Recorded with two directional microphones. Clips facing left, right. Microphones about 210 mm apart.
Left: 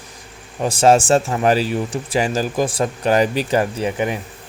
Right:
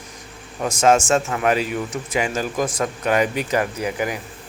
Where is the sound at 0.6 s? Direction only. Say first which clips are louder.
Left 3 dB; 30° left (ahead or behind).